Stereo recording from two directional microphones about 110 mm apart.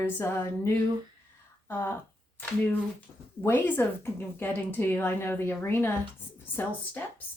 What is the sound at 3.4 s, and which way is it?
Speech, 20° left (ahead or behind).